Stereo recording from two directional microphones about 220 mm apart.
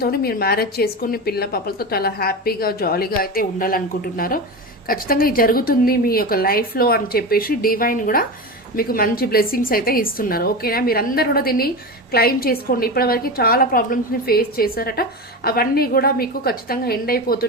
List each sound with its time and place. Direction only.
0.0 s a woman's voice: 45° left (ahead or behind)